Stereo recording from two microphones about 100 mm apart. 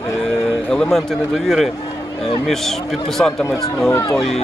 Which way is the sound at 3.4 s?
25° left (ahead or behind).